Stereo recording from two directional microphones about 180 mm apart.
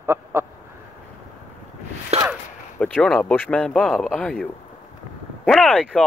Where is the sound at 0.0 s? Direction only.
15° right (ahead or behind).